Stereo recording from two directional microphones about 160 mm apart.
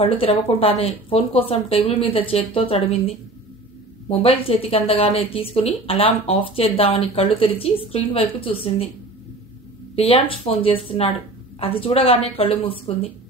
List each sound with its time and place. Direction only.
0.0 s speech: 35° left (ahead or behind)
4.1 s speech: 35° left (ahead or behind)
9.9 s speech: 35° left (ahead or behind)